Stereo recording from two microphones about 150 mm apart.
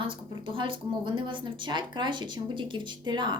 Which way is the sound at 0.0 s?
35° right (ahead or behind).